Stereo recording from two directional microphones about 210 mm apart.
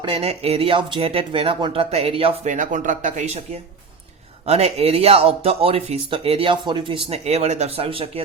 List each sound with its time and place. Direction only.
0.0 s speech: 25° right (ahead or behind)